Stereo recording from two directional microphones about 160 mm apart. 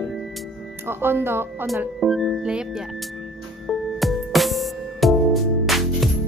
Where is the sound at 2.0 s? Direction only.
Centre (ahead or behind).